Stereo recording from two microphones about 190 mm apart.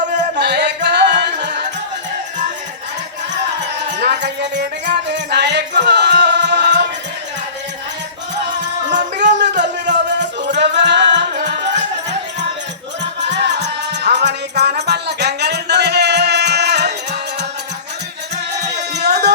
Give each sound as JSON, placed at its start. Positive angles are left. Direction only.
{"t": 0.3, "sound": "music", "side_deg": -65}
{"t": 3.9, "sound": "music", "side_deg": -65}
{"t": 9.1, "sound": "music", "side_deg": -65}
{"t": 13.0, "sound": "music", "side_deg": -65}
{"t": 18.7, "sound": "music", "side_deg": -60}